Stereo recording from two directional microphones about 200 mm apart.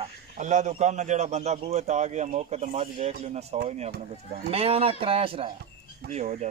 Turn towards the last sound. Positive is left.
turn(degrees=-35)  # may be behind; listen again after turning